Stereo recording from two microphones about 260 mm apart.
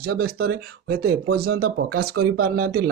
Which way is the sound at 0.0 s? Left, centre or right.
Right.